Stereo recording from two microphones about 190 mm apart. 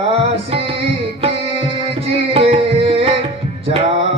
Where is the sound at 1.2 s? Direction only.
30° right (ahead or behind).